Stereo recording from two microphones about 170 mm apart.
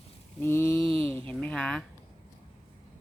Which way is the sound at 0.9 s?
10° left (ahead or behind).